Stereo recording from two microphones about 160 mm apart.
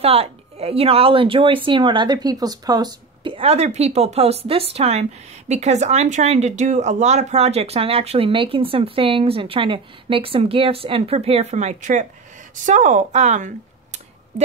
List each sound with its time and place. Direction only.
0.0 s speech: 40° right (ahead or behind)